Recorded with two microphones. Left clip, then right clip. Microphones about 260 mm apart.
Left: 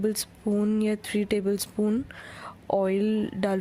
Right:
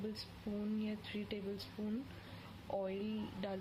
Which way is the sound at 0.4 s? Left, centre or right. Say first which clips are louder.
Left 17 dB; left.